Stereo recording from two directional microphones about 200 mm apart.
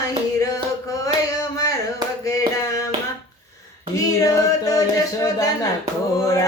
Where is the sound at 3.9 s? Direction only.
15° left (ahead or behind).